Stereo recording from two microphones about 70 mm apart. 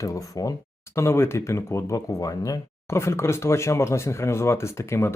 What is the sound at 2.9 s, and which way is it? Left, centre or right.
Speech, left.